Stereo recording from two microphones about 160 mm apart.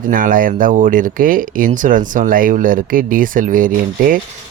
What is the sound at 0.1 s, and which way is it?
Speech, 60° right (ahead or behind).